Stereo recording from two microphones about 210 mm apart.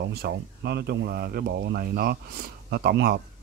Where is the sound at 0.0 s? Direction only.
50° right (ahead or behind).